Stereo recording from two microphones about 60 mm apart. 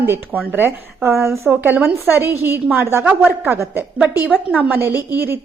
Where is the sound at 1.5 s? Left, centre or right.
Right.